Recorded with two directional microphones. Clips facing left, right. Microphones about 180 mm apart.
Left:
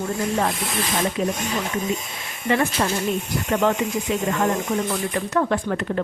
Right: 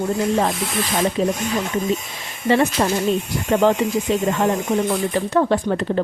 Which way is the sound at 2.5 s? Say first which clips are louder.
Right 4 dB; 30° right (ahead or behind).